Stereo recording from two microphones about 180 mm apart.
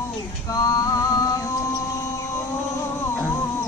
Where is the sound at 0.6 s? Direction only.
20° left (ahead or behind).